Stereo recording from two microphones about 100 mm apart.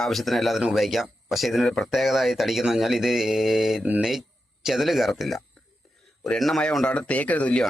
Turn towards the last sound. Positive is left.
turn(degrees=15)  # may be behind; listen again after turning